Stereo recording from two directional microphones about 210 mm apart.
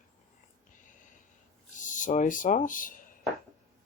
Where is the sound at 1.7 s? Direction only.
35° left (ahead or behind).